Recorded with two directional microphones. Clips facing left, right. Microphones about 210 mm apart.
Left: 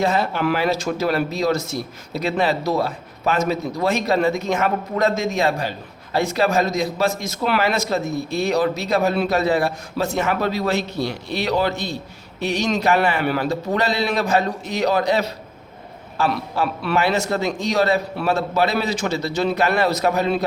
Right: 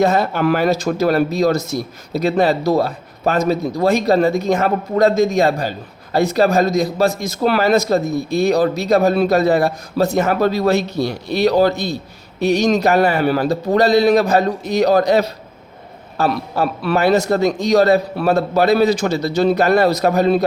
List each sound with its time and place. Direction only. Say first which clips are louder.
0.0 s a man's voice: right 5 dB; 40° right (ahead or behind)